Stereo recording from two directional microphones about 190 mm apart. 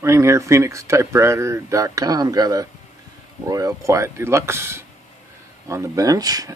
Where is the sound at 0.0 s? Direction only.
15° right (ahead or behind).